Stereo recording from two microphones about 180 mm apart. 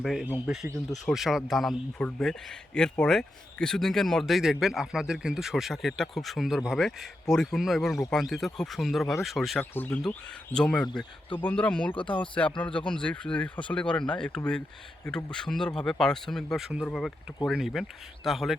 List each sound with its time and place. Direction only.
0.0 s a man's voice: centre (ahead or behind)